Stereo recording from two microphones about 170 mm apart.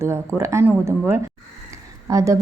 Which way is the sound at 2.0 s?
20° right (ahead or behind).